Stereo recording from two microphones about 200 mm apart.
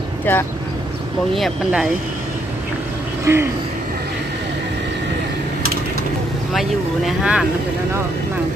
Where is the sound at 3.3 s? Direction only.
10° right (ahead or behind).